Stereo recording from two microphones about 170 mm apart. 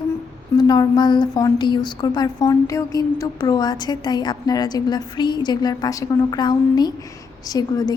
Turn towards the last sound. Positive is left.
turn(degrees=20)  # may be behind; listen again after turning